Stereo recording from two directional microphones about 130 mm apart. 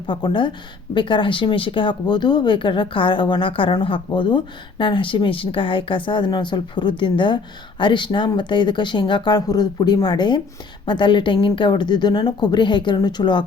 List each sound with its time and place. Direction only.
0.1 s speech: 35° left (ahead or behind)